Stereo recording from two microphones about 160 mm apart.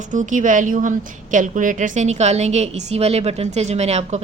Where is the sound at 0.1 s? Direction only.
50° right (ahead or behind).